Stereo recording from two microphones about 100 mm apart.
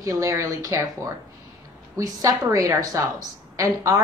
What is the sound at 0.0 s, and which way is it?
A woman's voice, 35° right (ahead or behind).